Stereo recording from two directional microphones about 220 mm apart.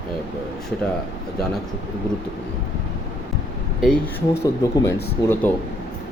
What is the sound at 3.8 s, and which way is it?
Speech, 10° left (ahead or behind).